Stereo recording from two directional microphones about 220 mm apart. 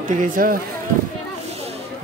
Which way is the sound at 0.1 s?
35° right (ahead or behind).